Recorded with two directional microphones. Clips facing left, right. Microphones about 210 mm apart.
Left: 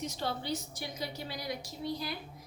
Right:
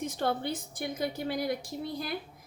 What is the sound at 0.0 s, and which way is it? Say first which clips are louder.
A woman's voice: right 5 dB; 55° right (ahead or behind).